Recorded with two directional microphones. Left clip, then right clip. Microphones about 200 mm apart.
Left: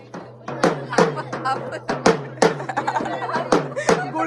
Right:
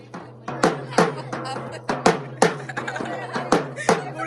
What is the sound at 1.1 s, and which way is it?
Music, 45° left (ahead or behind).